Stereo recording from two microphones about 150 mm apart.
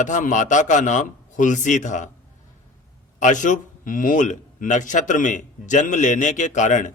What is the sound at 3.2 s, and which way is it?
A man's voice, 55° left (ahead or behind).